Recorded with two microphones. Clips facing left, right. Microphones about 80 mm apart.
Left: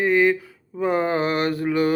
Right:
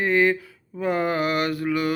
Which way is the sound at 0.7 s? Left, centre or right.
Left.